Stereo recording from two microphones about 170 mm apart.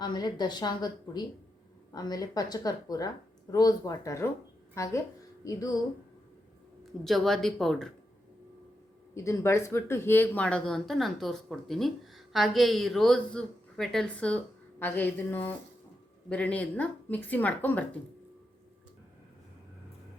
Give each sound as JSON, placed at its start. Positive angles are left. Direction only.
{"t": 0.0, "sound": "a woman's voice", "side_deg": 25}
{"t": 6.8, "sound": "speech", "side_deg": 0}
{"t": 9.1, "sound": "speech", "side_deg": 15}